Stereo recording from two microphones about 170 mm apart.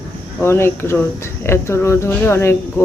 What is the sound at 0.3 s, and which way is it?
Speech, 15° left (ahead or behind).